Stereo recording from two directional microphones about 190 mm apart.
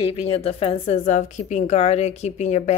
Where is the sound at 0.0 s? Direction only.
30° left (ahead or behind).